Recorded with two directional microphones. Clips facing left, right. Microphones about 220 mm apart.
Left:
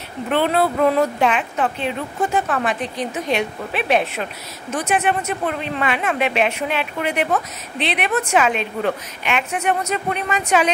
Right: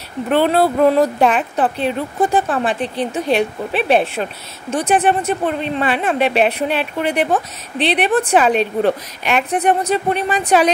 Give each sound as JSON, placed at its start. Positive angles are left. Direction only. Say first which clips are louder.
{"t": 0.3, "sound": "speech", "louder": "right 4 dB", "side_deg": -35}